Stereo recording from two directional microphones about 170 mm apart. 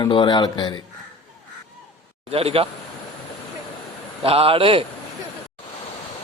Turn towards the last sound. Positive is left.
turn(degrees=-35)  # may be behind; listen again after turning